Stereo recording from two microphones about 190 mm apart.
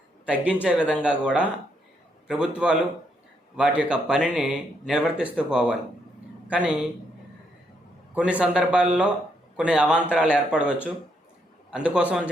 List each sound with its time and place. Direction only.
0.3 s a man's voice: 5° right (ahead or behind)
8.1 s speech: 5° right (ahead or behind)